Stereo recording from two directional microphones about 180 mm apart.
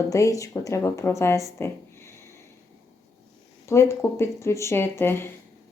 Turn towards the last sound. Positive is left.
turn(degrees=15)  # may be behind; listen again after turning